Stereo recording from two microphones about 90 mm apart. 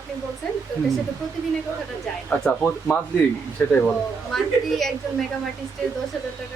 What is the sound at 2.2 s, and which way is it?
Speech, 15° left (ahead or behind).